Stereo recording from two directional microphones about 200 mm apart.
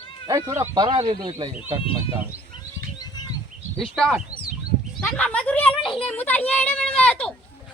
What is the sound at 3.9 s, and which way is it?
Speech, centre (ahead or behind).